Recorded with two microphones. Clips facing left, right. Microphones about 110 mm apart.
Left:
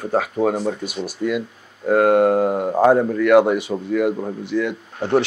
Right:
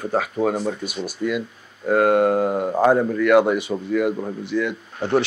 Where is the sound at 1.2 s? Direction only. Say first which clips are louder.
Left 2 dB; 50° left (ahead or behind).